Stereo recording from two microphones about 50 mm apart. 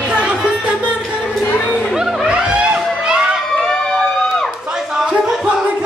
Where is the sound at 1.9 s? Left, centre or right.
Centre.